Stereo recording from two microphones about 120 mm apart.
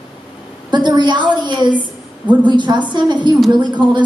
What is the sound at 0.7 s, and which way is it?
A woman's voice, 40° right (ahead or behind).